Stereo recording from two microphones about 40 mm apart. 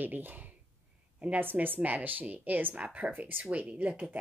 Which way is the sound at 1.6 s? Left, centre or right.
Right.